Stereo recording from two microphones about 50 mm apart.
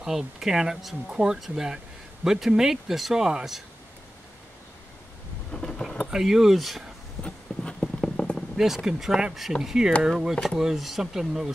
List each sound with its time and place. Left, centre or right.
0.0 s speech: centre
5.5 s a sound: centre
6.0 s speech: centre
7.5 s clip-clop: centre
7.8 s vehicle: centre
8.5 s speech: centre
10.3 s speech: centre